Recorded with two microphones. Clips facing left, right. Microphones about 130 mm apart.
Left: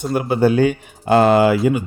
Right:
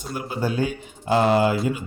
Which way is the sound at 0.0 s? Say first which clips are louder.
Left 11 dB; 70° left (ahead or behind).